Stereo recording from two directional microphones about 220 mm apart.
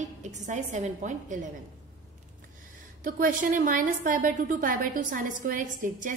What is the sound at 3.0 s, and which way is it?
A woman's voice, 40° right (ahead or behind).